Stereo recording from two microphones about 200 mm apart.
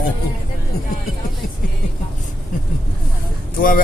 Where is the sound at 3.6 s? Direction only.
45° left (ahead or behind).